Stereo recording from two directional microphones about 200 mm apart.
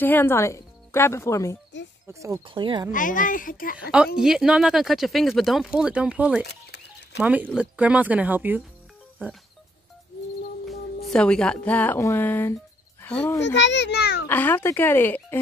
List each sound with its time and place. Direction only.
0.0 s speech: 10° left (ahead or behind)
2.0 s speech: 15° right (ahead or behind)
2.9 s a child's voice: 40° left (ahead or behind)
4.2 s speech: 5° right (ahead or behind)
6.4 s a sound: 55° left (ahead or behind)
7.2 s speech: 5° right (ahead or behind)
11.1 s a child's voice: 5° left (ahead or behind)
13.4 s a child's voice: 60° left (ahead or behind)
14.2 s speech: 10° left (ahead or behind)